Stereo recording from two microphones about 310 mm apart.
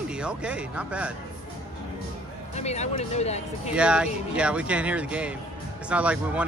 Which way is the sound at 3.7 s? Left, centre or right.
Centre.